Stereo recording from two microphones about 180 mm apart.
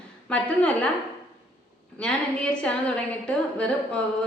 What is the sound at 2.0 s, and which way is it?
A woman's voice, 5° left (ahead or behind).